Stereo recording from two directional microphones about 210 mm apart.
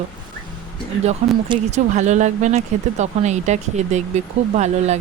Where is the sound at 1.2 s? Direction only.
35° right (ahead or behind).